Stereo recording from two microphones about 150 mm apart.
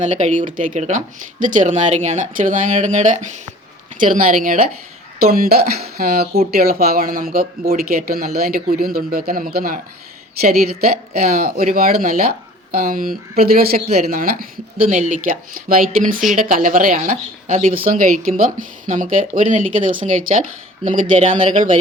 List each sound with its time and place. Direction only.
0.0 s speech: 55° right (ahead or behind)
5.2 s speech: 85° right
10.4 s speech: 90° right; by 13.1 s 70° right (ahead or behind)
13.4 s speech: 90° right
14.1 s speech: 70° right (ahead or behind)
17.1 s speech: 55° right (ahead or behind)
17.7 s speech: 70° right (ahead or behind)